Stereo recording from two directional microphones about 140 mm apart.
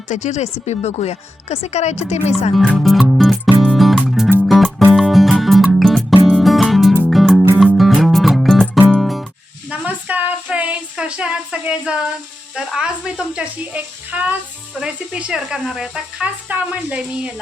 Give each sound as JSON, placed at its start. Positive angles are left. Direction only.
{"t": 0.1, "sound": "speech", "side_deg": 60}
{"t": 2.6, "sound": "music", "side_deg": 0}
{"t": 9.6, "sound": "a sound", "side_deg": -10}
{"t": 12.5, "sound": "speech", "side_deg": -5}